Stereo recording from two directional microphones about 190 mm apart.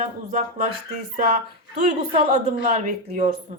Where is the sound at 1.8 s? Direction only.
35° right (ahead or behind).